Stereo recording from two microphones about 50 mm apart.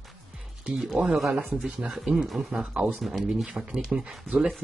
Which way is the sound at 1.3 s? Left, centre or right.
Right.